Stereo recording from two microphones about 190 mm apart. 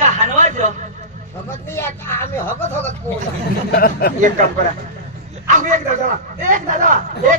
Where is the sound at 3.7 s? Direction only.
55° left (ahead or behind).